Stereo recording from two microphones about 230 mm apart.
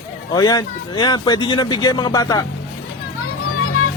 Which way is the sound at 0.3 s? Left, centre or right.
Centre.